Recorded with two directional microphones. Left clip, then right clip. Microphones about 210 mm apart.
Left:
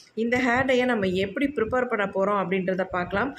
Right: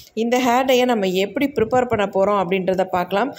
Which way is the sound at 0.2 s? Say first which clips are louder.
Right 6 dB; 20° right (ahead or behind).